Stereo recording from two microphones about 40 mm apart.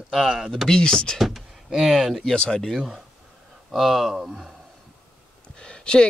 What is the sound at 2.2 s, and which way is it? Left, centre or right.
Speech, left.